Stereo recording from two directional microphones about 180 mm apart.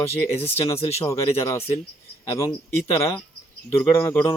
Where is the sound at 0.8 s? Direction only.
35° left (ahead or behind).